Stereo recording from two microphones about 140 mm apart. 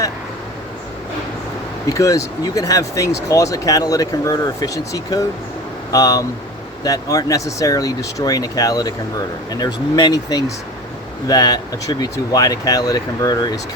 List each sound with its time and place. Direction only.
1.9 s speech: 25° left (ahead or behind)